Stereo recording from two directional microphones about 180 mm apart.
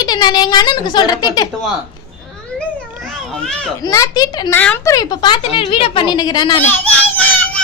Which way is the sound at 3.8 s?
20° left (ahead or behind).